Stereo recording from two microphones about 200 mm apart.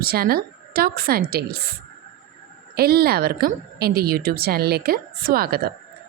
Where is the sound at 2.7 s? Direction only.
50° right (ahead or behind).